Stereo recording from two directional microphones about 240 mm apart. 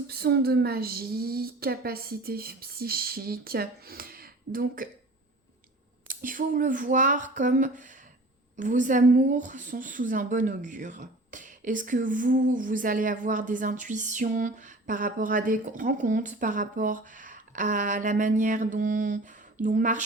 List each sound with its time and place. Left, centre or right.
0.1 s a woman's voice: right
6.1 s a woman's voice: right